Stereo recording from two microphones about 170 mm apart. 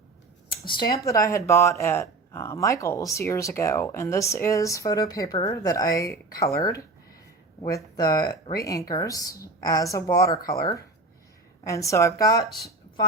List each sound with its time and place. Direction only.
0.4 s a woman's voice: 30° left (ahead or behind)
7.9 s a woman's voice: 20° left (ahead or behind)